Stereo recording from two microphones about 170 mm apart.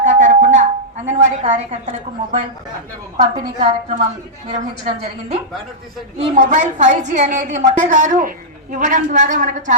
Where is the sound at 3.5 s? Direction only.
45° right (ahead or behind).